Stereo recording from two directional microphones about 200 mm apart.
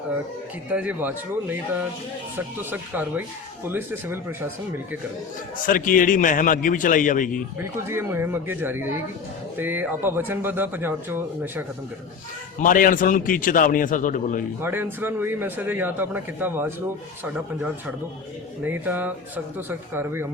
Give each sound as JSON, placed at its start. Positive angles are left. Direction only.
{"t": 0.7, "sound": "a man's voice", "side_deg": -5}
{"t": 2.6, "sound": "a man's voice", "side_deg": -10}
{"t": 5.6, "sound": "a man's voice", "side_deg": 40}
{"t": 7.6, "sound": "a man's voice", "side_deg": -10}
{"t": 12.6, "sound": "a man's voice", "side_deg": 45}
{"t": 14.6, "sound": "a man's voice", "side_deg": -10}
{"t": 18.6, "sound": "a man's voice", "side_deg": -10}